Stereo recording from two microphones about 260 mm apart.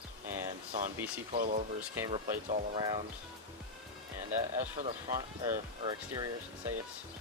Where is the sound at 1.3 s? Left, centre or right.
Right.